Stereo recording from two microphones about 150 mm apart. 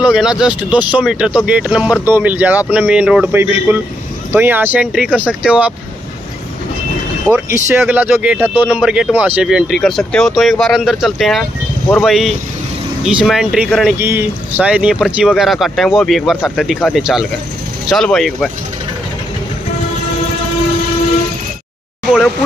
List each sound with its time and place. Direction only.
0.0 s speech: 5° right (ahead or behind)
7.3 s speech: 15° right (ahead or behind); by 13.9 s centre (ahead or behind)
13.9 s speech: 15° right (ahead or behind); by 18.5 s 5° left (ahead or behind)